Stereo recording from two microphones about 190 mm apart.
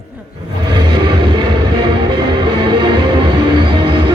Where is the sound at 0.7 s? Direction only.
25° right (ahead or behind).